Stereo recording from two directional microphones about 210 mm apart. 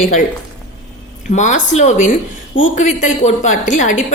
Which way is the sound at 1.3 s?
35° left (ahead or behind).